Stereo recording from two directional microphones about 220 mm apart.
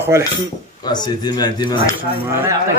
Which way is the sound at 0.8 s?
20° left (ahead or behind).